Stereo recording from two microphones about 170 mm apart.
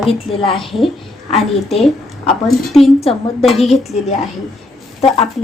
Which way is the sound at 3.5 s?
Centre (ahead or behind).